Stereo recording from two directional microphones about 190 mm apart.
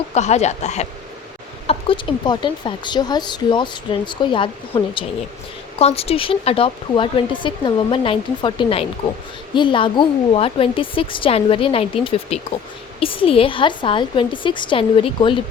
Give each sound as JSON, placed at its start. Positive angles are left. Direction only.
{"t": 0.1, "sound": "speech", "side_deg": 35}
{"t": 1.6, "sound": "speech", "side_deg": 25}